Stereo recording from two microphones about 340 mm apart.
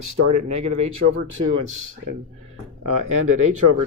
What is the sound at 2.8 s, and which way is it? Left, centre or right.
Speech, right.